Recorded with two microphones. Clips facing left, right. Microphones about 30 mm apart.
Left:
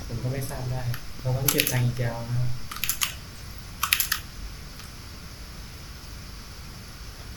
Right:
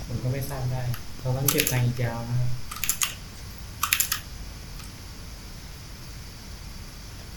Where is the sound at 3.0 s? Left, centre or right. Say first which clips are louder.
Left 1 dB; centre.